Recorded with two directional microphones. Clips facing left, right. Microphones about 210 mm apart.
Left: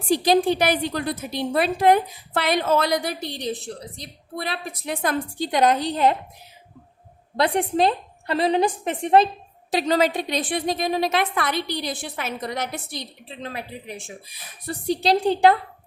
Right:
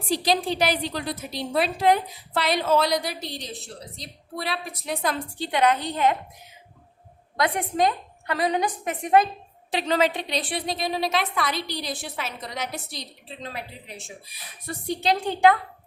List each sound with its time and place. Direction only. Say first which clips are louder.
0.1 s a woman's voice: left 6 dB; 50° left (ahead or behind)
4.4 s a woman's voice: left 1 dB; 50° left (ahead or behind); by 6.1 s 35° left (ahead or behind)
7.3 s a woman's voice: left 3 dB; 30° left (ahead or behind); by 13.9 s 55° left (ahead or behind)
14.7 s a woman's voice: left 4 dB; 35° left (ahead or behind)